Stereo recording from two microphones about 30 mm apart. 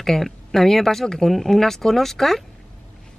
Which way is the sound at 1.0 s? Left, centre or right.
Left.